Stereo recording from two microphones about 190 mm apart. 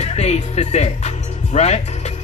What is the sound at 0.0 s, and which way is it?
Speech, 35° left (ahead or behind).